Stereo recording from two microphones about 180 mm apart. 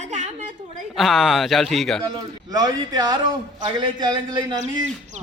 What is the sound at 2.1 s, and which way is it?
A man's voice, 20° right (ahead or behind).